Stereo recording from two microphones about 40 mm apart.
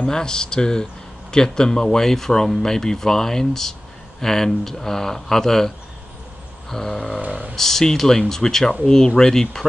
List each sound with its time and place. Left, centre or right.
0.0 s speech: centre
6.7 s speech: centre